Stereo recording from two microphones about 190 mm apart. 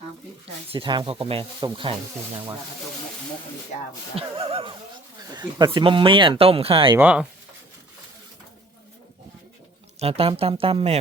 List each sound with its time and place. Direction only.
0.4 s speech: 30° right (ahead or behind)
4.1 s speech: 30° right (ahead or behind)
6.9 s speech: 10° right (ahead or behind)
10.0 s speech: 30° right (ahead or behind)